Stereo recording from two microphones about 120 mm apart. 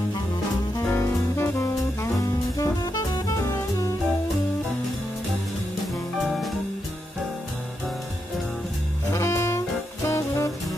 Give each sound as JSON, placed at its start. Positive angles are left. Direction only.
{"t": 0.8, "sound": "saxophone", "side_deg": 20}
{"t": 2.5, "sound": "jazz", "side_deg": 30}
{"t": 9.1, "sound": "music", "side_deg": 25}
{"t": 10.0, "sound": "saxophone", "side_deg": 25}